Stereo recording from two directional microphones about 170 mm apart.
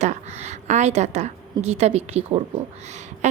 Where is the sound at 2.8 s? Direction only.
40° right (ahead or behind).